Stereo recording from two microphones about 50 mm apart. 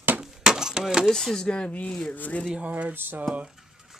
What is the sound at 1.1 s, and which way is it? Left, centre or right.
Speech, centre.